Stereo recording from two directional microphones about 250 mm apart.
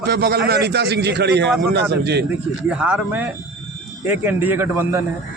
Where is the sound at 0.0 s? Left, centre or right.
Right.